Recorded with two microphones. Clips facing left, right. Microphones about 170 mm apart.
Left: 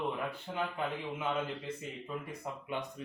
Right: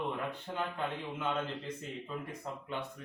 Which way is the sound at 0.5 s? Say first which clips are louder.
Left 1 dB; 10° left (ahead or behind).